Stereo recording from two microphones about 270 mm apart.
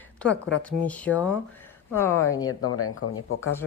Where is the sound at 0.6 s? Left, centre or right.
Centre.